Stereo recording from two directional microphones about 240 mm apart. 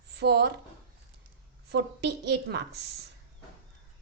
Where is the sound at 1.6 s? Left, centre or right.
Right.